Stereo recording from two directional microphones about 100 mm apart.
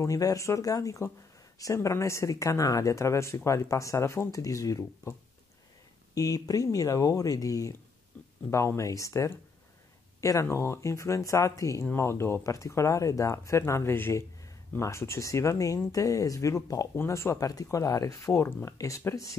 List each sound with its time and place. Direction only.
0.0 s speech: 35° left (ahead or behind)
6.1 s speech: 35° left (ahead or behind)